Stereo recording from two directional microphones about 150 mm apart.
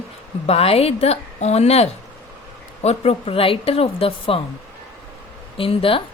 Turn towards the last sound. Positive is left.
turn(degrees=35)  # may be behind; listen again after turning